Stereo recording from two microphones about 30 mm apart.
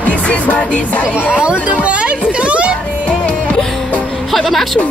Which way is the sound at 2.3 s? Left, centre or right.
Right.